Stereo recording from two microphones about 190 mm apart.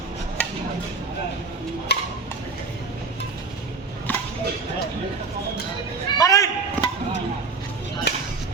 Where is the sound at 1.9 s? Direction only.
60° left (ahead or behind).